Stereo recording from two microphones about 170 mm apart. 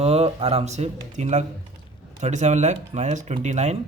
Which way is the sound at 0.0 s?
35° right (ahead or behind).